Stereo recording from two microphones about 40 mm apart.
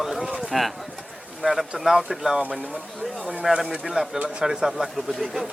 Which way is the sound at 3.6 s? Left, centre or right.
Right.